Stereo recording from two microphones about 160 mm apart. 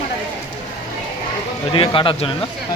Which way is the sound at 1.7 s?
30° left (ahead or behind).